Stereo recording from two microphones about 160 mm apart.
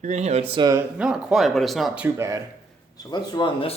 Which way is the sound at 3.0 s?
25° left (ahead or behind).